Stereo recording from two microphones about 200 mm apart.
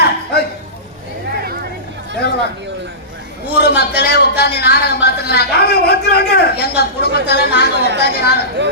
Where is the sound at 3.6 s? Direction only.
55° left (ahead or behind).